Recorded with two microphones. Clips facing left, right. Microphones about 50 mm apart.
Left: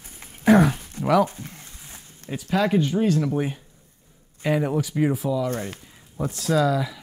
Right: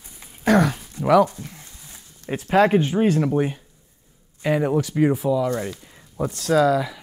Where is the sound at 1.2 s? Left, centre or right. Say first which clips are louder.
Right 3 dB; left.